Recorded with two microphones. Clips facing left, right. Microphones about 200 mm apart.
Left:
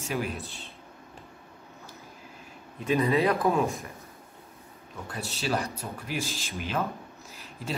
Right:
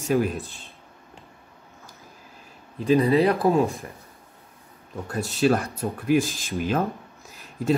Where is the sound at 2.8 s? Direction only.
30° right (ahead or behind).